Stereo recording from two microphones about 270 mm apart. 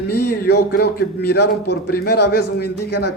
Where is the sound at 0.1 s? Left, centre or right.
Left.